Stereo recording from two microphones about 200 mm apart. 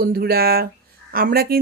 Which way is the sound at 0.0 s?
50° right (ahead or behind).